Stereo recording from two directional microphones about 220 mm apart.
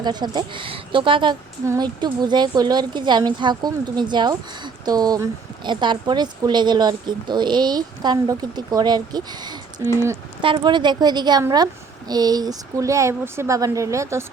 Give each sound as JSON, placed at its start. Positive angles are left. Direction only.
{"t": 0.0, "sound": "a woman's voice", "side_deg": -20}